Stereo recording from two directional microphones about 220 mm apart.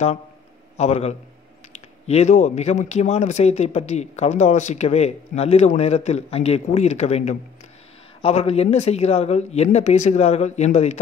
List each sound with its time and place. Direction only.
0.7 s speech: 30° left (ahead or behind)